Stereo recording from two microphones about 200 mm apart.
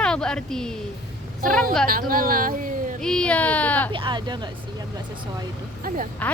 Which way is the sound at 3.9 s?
25° right (ahead or behind).